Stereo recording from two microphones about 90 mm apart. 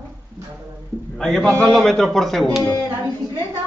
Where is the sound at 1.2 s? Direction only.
5° left (ahead or behind).